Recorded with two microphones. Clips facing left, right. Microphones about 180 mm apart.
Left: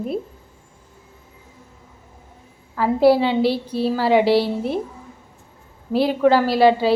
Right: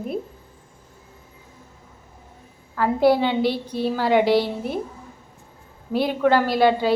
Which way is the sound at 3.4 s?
30° left (ahead or behind).